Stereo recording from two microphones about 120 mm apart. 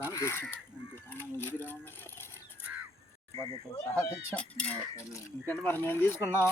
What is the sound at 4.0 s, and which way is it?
Speech, 10° left (ahead or behind).